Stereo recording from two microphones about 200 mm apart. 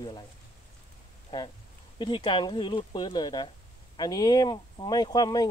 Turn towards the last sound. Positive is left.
turn(degrees=20)  # may be behind; listen again after turning